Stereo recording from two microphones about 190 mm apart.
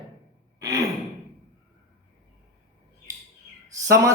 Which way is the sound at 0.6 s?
20° right (ahead or behind).